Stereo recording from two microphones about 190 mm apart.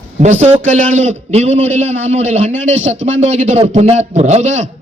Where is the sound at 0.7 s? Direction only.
40° right (ahead or behind).